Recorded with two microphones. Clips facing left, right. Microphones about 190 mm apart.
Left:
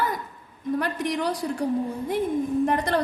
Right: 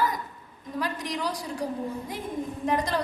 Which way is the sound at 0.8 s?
60° left (ahead or behind).